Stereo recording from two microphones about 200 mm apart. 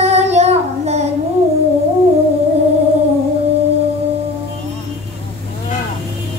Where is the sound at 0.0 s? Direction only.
30° right (ahead or behind).